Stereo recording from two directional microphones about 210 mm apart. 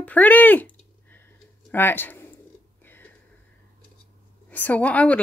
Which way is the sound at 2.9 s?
10° left (ahead or behind).